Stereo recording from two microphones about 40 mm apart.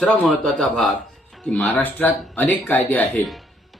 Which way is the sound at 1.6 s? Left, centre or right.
Left.